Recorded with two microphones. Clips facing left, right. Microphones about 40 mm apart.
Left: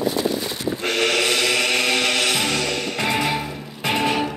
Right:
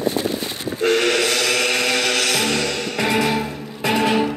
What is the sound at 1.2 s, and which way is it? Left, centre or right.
Music, left.